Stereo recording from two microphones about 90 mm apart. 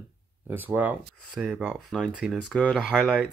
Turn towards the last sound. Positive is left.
turn(degrees=0)  # may be behind; listen again after turning